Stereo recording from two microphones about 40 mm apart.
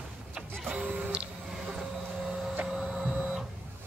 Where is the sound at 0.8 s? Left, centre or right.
Right.